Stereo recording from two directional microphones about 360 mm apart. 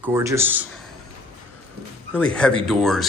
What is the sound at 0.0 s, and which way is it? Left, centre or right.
Speech, centre.